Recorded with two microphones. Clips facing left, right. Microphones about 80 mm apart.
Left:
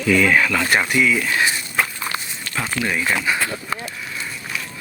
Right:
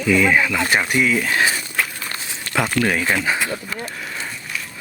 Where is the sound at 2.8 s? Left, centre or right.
Right.